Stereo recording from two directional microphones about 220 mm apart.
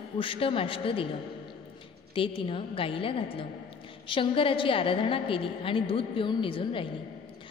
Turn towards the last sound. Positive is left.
turn(degrees=25)  # may be behind; listen again after turning